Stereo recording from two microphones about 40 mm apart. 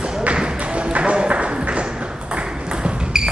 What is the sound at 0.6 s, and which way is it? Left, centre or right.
Ping, right.